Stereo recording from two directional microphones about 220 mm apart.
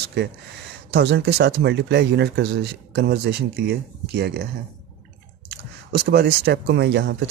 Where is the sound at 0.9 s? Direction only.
50° right (ahead or behind).